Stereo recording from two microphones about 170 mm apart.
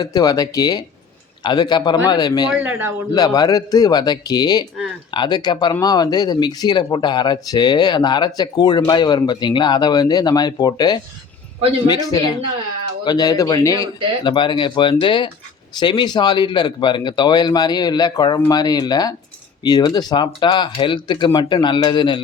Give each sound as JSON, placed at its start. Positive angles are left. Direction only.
{"t": 0.0, "sound": "speech", "side_deg": 20}
{"t": 2.5, "sound": "a man's voice", "side_deg": -10}
{"t": 3.1, "sound": "speech", "side_deg": 20}